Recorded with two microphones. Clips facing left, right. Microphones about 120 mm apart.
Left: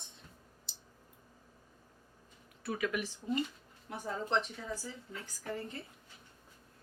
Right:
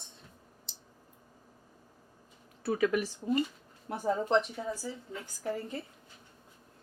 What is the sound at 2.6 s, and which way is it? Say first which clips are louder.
Speech: right 7 dB; 35° right (ahead or behind).